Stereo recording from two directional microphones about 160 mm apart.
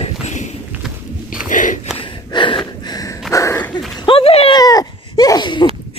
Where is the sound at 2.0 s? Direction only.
30° left (ahead or behind).